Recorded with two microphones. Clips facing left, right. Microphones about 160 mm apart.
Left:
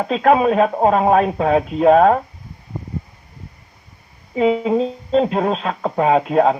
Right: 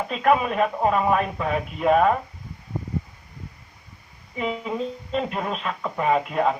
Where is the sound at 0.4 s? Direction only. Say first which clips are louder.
Left 7 dB; 45° left (ahead or behind).